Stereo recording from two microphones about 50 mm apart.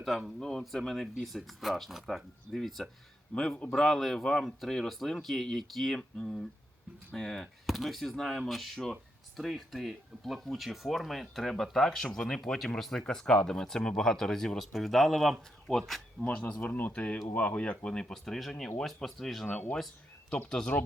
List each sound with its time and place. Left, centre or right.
0.3 s speech: centre
6.1 s speech: centre
7.4 s speech: centre
12.2 s speech: centre
12.5 s speech: centre
16.3 s speech: left
16.6 s speech: left; by 19.5 s centre
20.5 s speech: centre